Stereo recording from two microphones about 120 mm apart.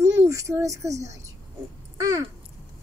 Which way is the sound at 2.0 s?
30° right (ahead or behind).